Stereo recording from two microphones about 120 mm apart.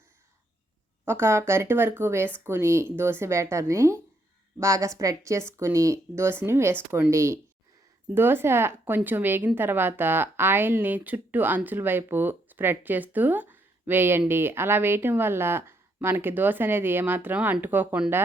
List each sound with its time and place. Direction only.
1.0 s a woman's voice: 20° right (ahead or behind)